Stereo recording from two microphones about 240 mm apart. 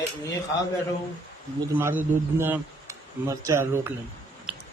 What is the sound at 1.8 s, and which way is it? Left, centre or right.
A man's voice, centre.